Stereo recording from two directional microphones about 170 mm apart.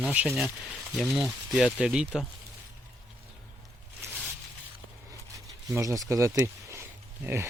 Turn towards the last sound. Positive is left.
turn(degrees=-15)  # may be behind; listen again after turning